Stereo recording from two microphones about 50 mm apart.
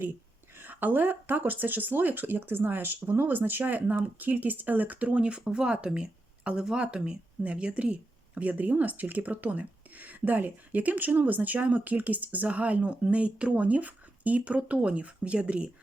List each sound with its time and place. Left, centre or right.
0.5 s a woman's voice: right